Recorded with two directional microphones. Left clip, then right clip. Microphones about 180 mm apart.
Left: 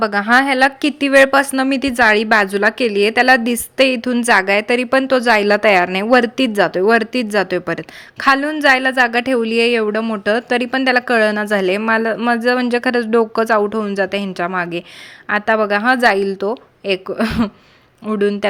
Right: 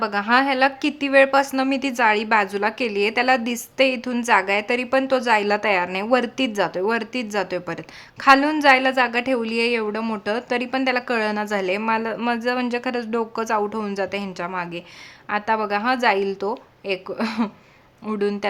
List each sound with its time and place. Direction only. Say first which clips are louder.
0.0 s a woman's voice: left 5 dB; 30° left (ahead or behind)